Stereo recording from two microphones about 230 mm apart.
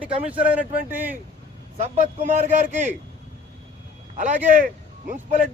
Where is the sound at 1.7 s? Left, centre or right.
Right.